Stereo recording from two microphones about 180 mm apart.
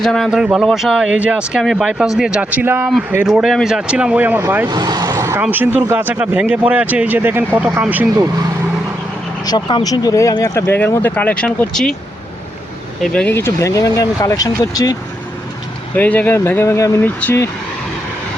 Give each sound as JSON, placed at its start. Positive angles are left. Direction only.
{"t": 0.0, "sound": "speech", "side_deg": 0}
{"t": 9.5, "sound": "speech", "side_deg": 25}
{"t": 13.0, "sound": "speech", "side_deg": 5}
{"t": 16.0, "sound": "speech", "side_deg": 10}